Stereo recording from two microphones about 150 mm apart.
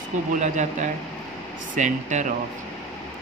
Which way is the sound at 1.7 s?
55° right (ahead or behind).